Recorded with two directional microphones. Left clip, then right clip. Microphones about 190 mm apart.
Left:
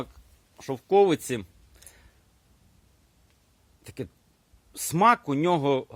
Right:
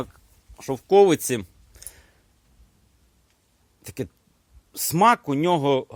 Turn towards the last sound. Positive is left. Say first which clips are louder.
# right 3 dB
turn(degrees=-15)  # may be behind; listen again after turning